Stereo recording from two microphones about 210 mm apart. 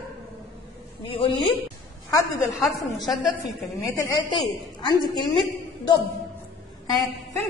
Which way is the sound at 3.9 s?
15° left (ahead or behind).